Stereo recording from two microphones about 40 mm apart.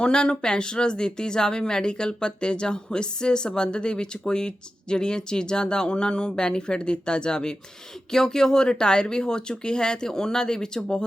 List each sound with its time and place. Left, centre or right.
0.0 s speech: left